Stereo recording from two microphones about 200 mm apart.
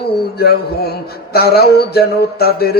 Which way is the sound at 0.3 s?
50° left (ahead or behind).